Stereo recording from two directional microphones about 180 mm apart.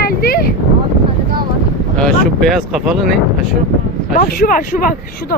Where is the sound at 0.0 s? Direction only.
60° left (ahead or behind).